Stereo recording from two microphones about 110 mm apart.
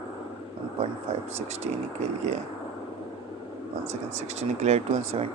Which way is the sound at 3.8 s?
90° right.